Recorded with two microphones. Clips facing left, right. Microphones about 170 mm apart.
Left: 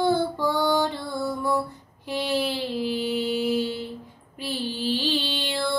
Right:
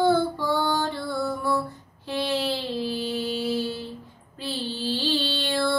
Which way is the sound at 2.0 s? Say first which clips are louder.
Even; 15° left (ahead or behind).